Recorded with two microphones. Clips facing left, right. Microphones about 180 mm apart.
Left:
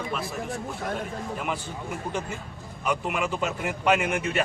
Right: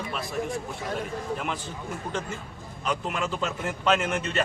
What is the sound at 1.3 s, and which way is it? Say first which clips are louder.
Speech: left 1 dB; 10° left (ahead or behind).